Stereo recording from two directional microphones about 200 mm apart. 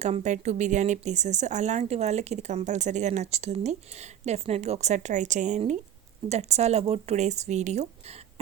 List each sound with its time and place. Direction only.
0.0 s speech: 35° right (ahead or behind)